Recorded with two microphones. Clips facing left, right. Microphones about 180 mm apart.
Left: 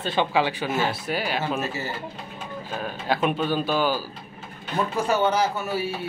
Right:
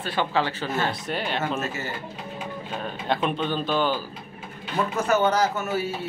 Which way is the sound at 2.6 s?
5° left (ahead or behind).